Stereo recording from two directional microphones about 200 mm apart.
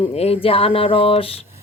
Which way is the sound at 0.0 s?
30° left (ahead or behind).